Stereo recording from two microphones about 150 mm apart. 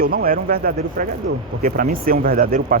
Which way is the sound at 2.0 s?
80° right.